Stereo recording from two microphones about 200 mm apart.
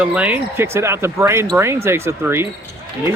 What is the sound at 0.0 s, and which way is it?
Speech, 5° right (ahead or behind).